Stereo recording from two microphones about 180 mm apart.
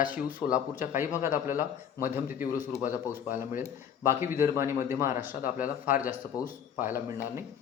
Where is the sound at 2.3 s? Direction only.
50° left (ahead or behind).